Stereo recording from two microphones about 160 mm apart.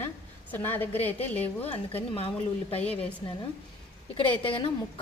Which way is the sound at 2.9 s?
40° left (ahead or behind).